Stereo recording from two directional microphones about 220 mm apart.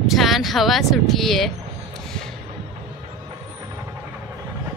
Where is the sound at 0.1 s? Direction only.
Centre (ahead or behind).